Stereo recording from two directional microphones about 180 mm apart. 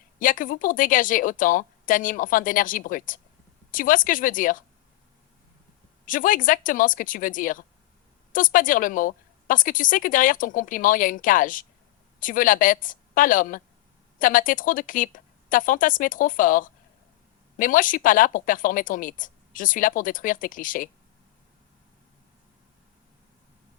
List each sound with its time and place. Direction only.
0.2 s a woman's voice: 50° left (ahead or behind)
6.1 s a woman's voice: 50° left (ahead or behind)